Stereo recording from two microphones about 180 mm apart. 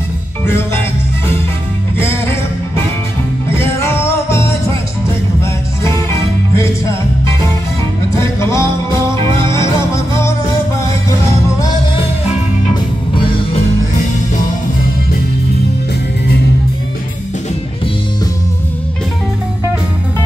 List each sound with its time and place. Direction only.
3.4 s music: 15° left (ahead or behind)
8.2 s music: 15° left (ahead or behind)